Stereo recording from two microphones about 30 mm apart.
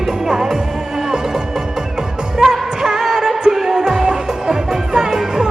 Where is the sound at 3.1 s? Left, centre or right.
Centre.